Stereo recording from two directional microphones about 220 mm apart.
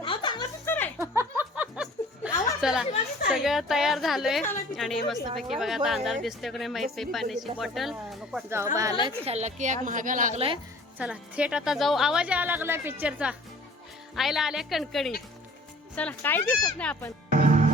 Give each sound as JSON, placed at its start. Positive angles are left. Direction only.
{"t": 0.0, "sound": "a sound", "side_deg": 20}
{"t": 0.9, "sound": "music", "side_deg": -10}
{"t": 2.6, "sound": "a woman's voice", "side_deg": -5}
{"t": 8.4, "sound": "speech", "side_deg": -10}
{"t": 9.0, "sound": "a woman's voice", "side_deg": -30}
{"t": 10.9, "sound": "a woman's voice", "side_deg": -5}
{"t": 17.3, "sound": "music", "side_deg": -35}